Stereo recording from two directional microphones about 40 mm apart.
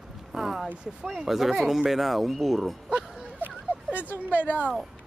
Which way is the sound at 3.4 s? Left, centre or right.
Right.